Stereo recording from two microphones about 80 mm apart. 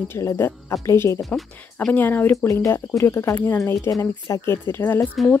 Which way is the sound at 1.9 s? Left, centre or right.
Left.